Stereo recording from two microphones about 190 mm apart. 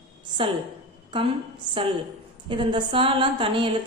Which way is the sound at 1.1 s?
25° right (ahead or behind).